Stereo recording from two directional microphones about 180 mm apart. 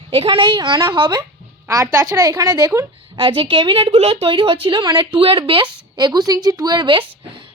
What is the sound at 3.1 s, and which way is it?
Speech, 30° right (ahead or behind).